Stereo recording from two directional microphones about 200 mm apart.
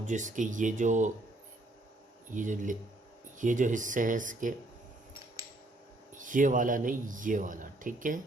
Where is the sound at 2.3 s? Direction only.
40° right (ahead or behind).